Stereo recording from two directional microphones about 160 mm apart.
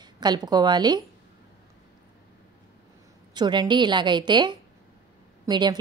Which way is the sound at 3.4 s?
30° right (ahead or behind).